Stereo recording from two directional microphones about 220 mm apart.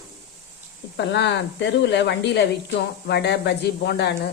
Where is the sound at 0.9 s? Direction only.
50° left (ahead or behind).